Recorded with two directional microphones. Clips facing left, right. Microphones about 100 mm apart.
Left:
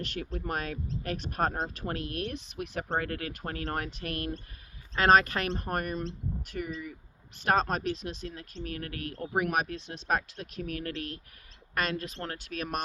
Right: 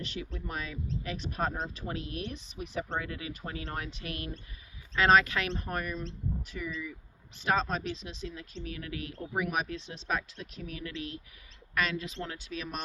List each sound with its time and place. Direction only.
0.0 s speech: 55° left (ahead or behind)